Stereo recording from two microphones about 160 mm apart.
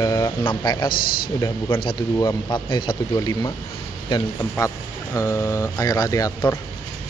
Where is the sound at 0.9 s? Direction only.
65° left (ahead or behind).